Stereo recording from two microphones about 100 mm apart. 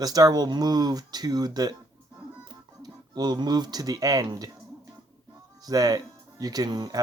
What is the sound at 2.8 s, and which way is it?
Speech, 45° right (ahead or behind).